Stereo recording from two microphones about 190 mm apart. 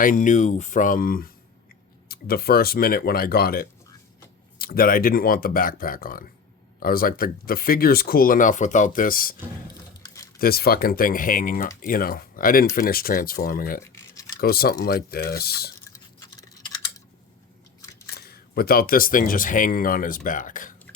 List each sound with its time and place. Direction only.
0.0 s speech: 45° left (ahead or behind)
10.3 s speech: 55° left (ahead or behind)
16.3 s typing: 15° left (ahead or behind)
18.3 s speech: 55° left (ahead or behind)